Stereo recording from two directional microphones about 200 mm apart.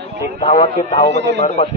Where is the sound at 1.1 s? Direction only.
60° right (ahead or behind).